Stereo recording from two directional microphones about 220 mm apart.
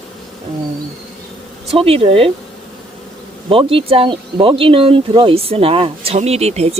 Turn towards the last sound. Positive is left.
turn(degrees=-30)  # may be behind; listen again after turning